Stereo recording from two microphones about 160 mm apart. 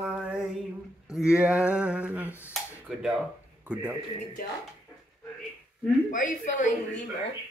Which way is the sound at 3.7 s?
10° right (ahead or behind).